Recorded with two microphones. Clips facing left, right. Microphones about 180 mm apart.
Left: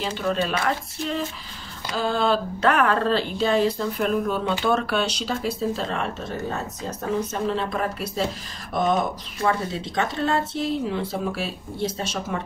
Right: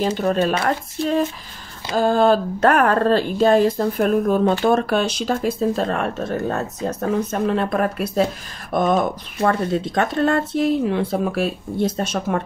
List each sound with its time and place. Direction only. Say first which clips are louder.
0.0 s speech: right 6 dB; 45° right (ahead or behind)